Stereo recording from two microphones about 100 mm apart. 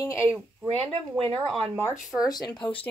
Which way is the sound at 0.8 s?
65° right (ahead or behind).